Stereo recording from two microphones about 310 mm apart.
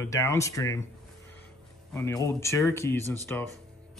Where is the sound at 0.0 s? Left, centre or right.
Centre.